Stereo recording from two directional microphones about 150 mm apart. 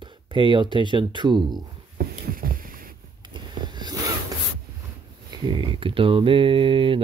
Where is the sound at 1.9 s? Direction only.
75° right (ahead or behind).